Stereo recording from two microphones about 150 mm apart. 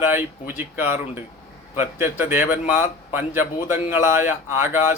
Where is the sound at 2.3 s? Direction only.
60° left (ahead or behind).